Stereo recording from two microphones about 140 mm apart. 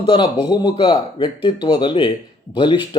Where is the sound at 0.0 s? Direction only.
35° left (ahead or behind).